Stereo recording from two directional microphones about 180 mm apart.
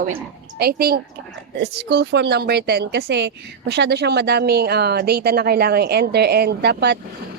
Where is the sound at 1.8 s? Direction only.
70° right (ahead or behind).